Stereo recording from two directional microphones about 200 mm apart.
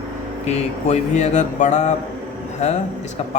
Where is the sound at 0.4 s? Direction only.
35° left (ahead or behind).